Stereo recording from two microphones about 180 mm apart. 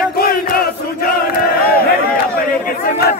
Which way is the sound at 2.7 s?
55° left (ahead or behind).